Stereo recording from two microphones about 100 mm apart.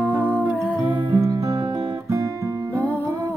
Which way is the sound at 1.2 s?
35° right (ahead or behind).